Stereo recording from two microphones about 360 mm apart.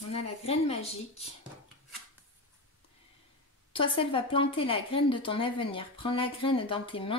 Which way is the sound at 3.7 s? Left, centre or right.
Centre.